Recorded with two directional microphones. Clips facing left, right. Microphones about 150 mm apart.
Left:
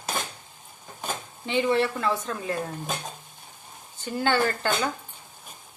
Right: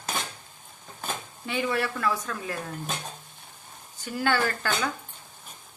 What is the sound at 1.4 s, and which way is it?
Speech, 25° left (ahead or behind).